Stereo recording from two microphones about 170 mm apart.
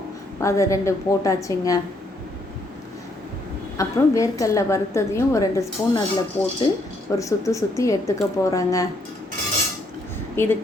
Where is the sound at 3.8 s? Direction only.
20° left (ahead or behind).